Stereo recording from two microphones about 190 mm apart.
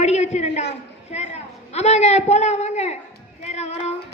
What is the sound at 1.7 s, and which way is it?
A woman's voice, 35° left (ahead or behind).